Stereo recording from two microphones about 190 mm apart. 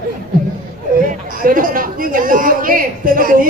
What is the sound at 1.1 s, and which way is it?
A woman's voice, 45° right (ahead or behind).